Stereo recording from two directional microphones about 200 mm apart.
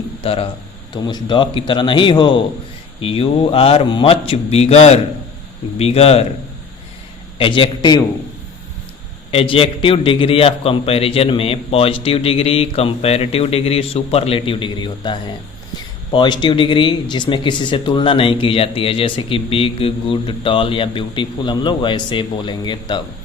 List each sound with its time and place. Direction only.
0.2 s speech: 30° left (ahead or behind)
7.3 s speech: 25° left (ahead or behind)
9.3 s speech: 30° left (ahead or behind)